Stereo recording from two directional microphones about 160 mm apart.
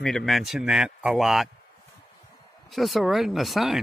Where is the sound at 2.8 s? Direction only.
Centre (ahead or behind).